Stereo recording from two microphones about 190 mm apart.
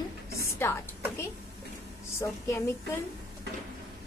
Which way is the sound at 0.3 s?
15° left (ahead or behind).